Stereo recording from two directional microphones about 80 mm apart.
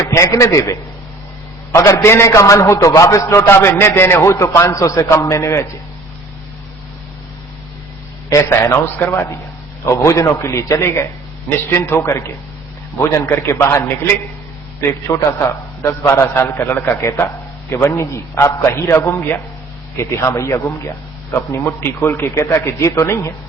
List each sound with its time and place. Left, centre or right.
0.1 s a man's voice: left
8.3 s a man's voice: left
13.0 s a man's voice: left